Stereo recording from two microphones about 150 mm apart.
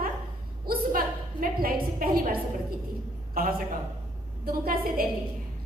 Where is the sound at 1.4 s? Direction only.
70° right (ahead or behind).